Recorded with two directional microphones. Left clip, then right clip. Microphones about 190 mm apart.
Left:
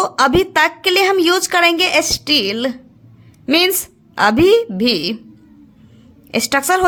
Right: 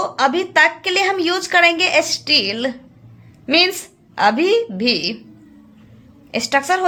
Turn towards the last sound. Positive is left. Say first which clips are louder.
# left 2 dB
turn(degrees=40)  # may be behind; listen again after turning